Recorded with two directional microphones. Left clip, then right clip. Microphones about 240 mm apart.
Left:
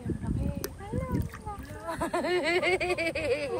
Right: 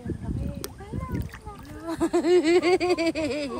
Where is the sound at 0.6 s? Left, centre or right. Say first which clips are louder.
Left 1 dB; centre.